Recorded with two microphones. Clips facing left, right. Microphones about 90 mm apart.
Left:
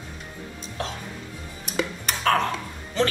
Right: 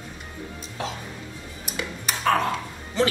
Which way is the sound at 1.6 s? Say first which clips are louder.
Left 4 dB; centre (ahead or behind).